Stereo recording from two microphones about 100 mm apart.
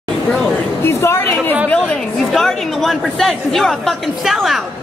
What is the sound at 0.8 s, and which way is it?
Speech, 25° left (ahead or behind).